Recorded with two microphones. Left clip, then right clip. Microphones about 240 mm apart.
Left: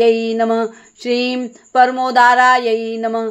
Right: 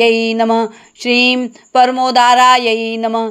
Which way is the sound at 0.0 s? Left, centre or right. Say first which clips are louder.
Right 2 dB; right.